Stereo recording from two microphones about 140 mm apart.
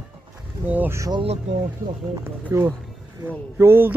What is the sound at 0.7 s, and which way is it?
Speech, 15° right (ahead or behind).